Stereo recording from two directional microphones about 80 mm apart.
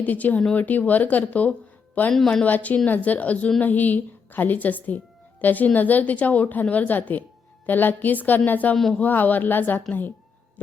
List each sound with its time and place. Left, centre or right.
0.0 s speech: left
2.1 s a woman's voice: centre
2.4 s speech: centre
8.7 s speech: centre
9.0 s speech: left